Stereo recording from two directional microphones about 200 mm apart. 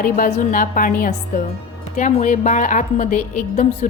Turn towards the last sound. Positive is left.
turn(degrees=40)  # may be behind; listen again after turning